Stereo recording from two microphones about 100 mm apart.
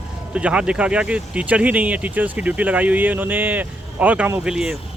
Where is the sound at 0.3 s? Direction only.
10° right (ahead or behind).